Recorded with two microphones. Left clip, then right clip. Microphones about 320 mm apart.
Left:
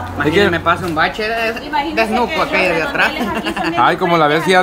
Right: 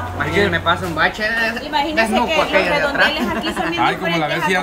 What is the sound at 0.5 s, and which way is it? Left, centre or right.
Speech, left.